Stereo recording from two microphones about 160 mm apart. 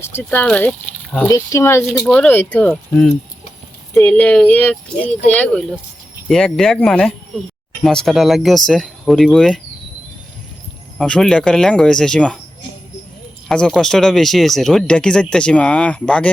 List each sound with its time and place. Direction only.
0.0 s speech: 15° left (ahead or behind)
1.3 s speech: 20° left (ahead or behind)
1.8 s speech: centre (ahead or behind)
10.9 s speech: 5° left (ahead or behind)
13.5 s speech: 5° left (ahead or behind)